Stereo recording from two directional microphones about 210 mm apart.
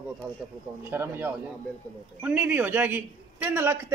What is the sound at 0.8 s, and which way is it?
A man's voice, 10° right (ahead or behind).